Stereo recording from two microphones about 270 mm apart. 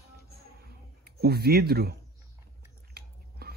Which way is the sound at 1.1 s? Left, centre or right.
Right.